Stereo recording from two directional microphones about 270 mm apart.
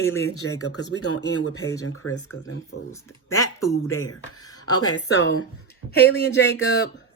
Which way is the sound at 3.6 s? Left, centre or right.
Left.